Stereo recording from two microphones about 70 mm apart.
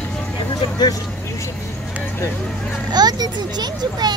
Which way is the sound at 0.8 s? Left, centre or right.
Left.